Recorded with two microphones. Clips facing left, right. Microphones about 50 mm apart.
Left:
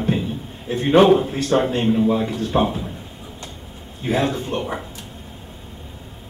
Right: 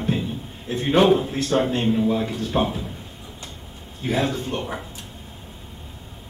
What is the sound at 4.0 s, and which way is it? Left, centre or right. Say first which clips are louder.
Speech: left 2 dB; centre.